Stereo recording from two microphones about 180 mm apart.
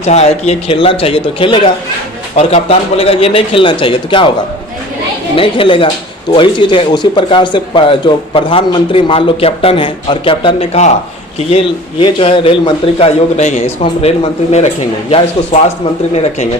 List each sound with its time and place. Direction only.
0.0 s a man's voice: 35° left (ahead or behind)
5.3 s a man's voice: 30° left (ahead or behind)